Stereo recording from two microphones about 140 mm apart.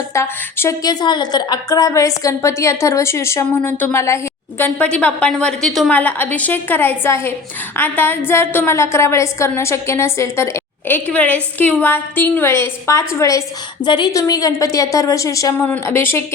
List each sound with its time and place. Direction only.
0.1 s a woman's voice: 20° left (ahead or behind)
1.0 s a woman's voice: 30° left (ahead or behind); by 5.9 s centre (ahead or behind)
5.9 s a woman's voice: 10° left (ahead or behind)
13.8 s a woman's voice: 30° left (ahead or behind)
15.6 s a woman's voice: 10° left (ahead or behind)